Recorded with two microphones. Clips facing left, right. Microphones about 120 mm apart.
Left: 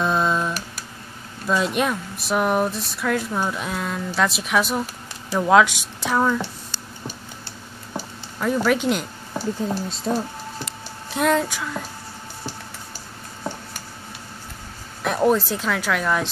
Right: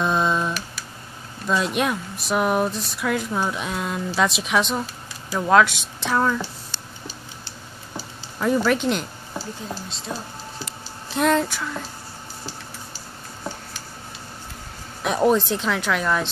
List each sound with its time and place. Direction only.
0.0 s a sound: centre (ahead or behind)
1.5 s speech: centre (ahead or behind)
8.5 s speech: 10° left (ahead or behind)
9.4 s speech: 55° left (ahead or behind)
11.1 s speech: 5° left (ahead or behind)
15.0 s speech: centre (ahead or behind)